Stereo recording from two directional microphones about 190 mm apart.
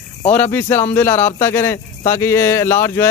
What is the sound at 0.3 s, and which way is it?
A man's voice, 10° left (ahead or behind).